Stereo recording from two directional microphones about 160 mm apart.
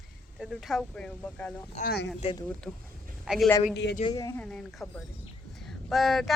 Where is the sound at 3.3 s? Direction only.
5° right (ahead or behind).